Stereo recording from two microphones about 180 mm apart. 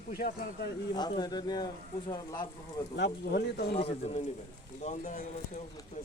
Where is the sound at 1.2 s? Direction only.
25° left (ahead or behind).